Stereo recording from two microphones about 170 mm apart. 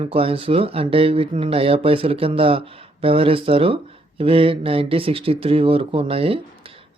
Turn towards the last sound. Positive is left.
turn(degrees=-35)  # may be behind; listen again after turning